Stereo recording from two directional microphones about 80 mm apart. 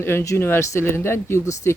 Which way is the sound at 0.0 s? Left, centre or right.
Left.